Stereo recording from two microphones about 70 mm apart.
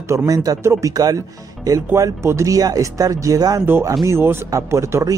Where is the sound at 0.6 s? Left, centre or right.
Right.